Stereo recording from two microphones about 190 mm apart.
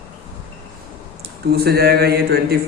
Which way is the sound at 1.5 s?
55° right (ahead or behind).